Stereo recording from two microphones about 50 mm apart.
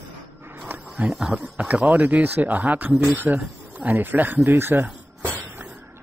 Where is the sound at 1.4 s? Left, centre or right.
Right.